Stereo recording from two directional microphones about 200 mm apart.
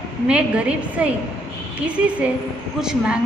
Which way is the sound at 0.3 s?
5° right (ahead or behind).